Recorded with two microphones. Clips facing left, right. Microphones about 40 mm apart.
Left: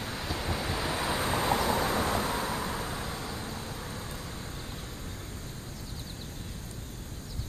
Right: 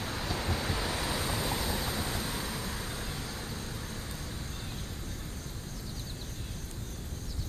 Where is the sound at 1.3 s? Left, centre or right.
Left; by 4.2 s centre.